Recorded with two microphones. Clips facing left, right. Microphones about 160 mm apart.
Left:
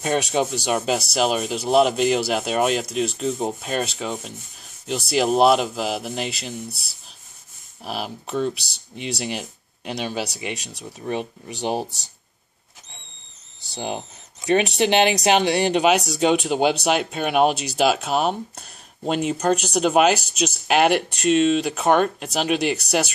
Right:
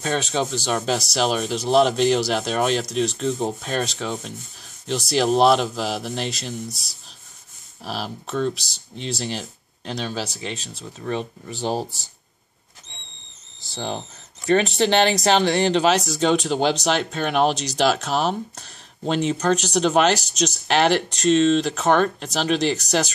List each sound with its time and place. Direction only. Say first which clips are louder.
0.0 s speech: left 2 dB; 10° left (ahead or behind)
7.8 s speech: even; 5° left (ahead or behind)
13.7 s speech: even; 15° left (ahead or behind)